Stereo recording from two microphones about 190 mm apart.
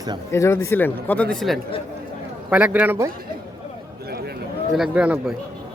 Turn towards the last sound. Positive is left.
turn(degrees=-5)  # may be behind; listen again after turning